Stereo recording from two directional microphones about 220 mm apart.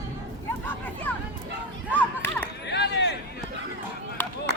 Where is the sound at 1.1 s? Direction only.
10° left (ahead or behind).